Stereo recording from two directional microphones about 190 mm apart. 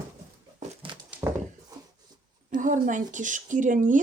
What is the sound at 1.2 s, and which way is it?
Horse, 10° right (ahead or behind).